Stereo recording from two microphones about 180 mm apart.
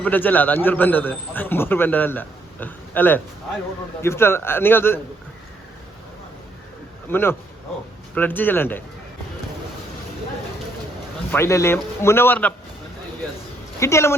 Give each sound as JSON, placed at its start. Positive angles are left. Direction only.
{"t": 0.0, "sound": "a man's voice", "side_deg": 10}
{"t": 7.1, "sound": "a man's voice", "side_deg": 10}
{"t": 11.3, "sound": "a man's voice", "side_deg": 15}
{"t": 13.7, "sound": "a man's voice", "side_deg": 15}